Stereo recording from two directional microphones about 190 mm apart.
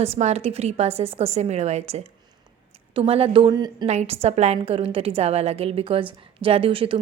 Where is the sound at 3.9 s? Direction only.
35° right (ahead or behind).